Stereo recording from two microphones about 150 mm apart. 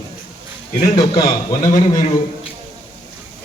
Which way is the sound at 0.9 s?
25° left (ahead or behind).